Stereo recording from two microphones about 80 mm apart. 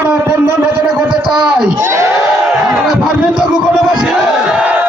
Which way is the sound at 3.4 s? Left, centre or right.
Centre.